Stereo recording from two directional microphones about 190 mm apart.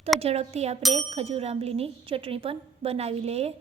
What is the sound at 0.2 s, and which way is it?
A woman's voice, 35° right (ahead or behind).